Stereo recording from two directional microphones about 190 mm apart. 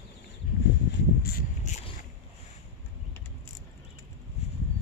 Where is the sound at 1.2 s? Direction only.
50° left (ahead or behind).